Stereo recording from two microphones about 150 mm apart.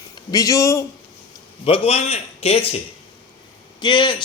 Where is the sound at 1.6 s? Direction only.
40° left (ahead or behind).